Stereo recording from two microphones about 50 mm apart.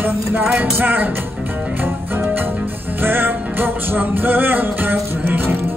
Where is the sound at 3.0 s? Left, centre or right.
Right.